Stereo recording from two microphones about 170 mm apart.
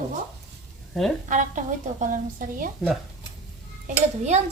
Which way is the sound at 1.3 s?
50° right (ahead or behind).